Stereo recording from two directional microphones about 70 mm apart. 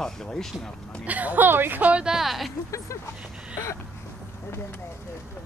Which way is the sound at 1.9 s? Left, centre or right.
Centre.